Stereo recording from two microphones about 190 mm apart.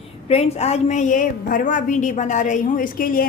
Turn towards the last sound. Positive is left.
turn(degrees=50)  # may be behind; listen again after turning